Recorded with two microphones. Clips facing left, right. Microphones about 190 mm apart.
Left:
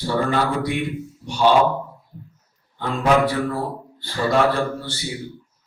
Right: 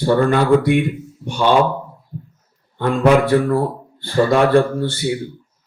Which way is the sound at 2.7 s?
55° right (ahead or behind).